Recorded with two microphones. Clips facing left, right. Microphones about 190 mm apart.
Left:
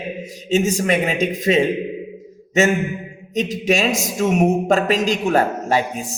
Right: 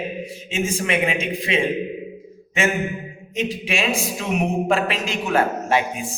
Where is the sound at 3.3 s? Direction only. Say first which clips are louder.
Left 6 dB; 40° left (ahead or behind).